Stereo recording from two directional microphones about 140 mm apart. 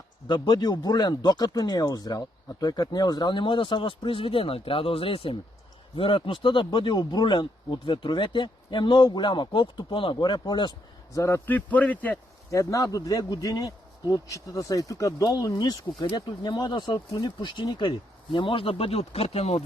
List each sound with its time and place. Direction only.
0.3 s speech: 30° left (ahead or behind); by 12.2 s 10° left (ahead or behind)
12.5 s speech: 25° left (ahead or behind); by 19.6 s 50° left (ahead or behind)